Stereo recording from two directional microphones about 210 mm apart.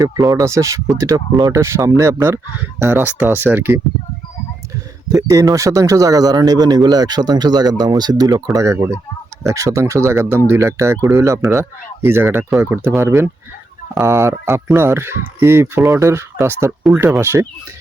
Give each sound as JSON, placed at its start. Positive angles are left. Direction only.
{"t": 0.0, "sound": "speech", "side_deg": -15}
{"t": 5.0, "sound": "speech", "side_deg": -15}